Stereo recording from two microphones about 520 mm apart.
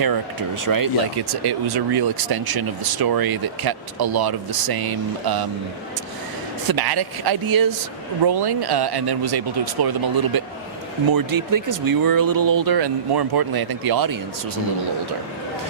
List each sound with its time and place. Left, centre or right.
0.0 s speech: right
6.7 s speech: right